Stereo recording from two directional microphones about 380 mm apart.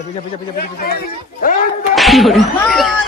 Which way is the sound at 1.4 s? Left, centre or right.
Left.